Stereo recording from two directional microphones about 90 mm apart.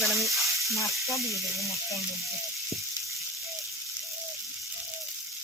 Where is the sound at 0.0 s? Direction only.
Centre (ahead or behind).